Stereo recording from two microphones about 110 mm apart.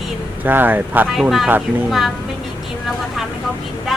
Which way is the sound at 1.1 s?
Centre (ahead or behind).